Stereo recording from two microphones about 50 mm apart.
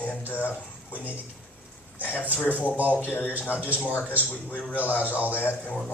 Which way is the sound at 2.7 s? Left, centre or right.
Right.